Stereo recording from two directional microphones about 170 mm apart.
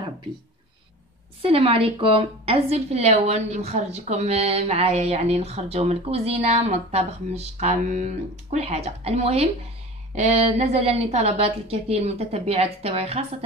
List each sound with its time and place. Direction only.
1.4 s a woman's voice: 35° right (ahead or behind)